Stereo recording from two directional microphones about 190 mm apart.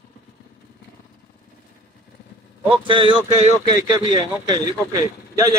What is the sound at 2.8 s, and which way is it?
A man's voice, 25° right (ahead or behind).